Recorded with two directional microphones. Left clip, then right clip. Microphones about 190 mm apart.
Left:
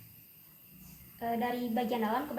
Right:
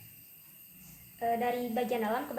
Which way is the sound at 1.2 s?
25° right (ahead or behind).